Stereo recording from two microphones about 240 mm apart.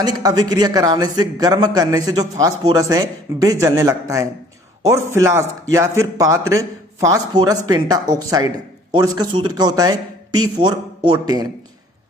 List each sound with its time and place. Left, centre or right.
0.0 s speech: centre